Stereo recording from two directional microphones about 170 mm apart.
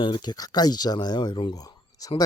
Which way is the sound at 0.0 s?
25° left (ahead or behind).